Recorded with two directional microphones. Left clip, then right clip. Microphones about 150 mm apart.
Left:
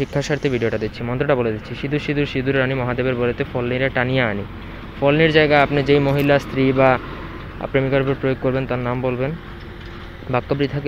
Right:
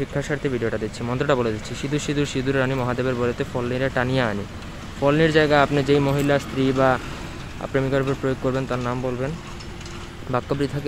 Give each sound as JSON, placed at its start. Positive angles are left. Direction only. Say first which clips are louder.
{"t": 0.1, "sound": "speech", "louder": "left 4 dB", "side_deg": 25}
{"t": 0.9, "sound": "speech", "louder": "left 2 dB", "side_deg": -5}
{"t": 10.3, "sound": "speech", "louder": "left 3 dB", "side_deg": 5}